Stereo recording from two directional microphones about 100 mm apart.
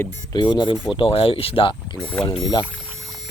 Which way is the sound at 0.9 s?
65° left (ahead or behind).